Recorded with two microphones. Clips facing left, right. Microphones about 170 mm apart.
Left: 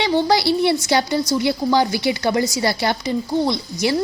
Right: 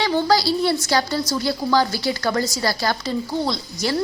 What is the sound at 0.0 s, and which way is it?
A woman's voice, 20° left (ahead or behind).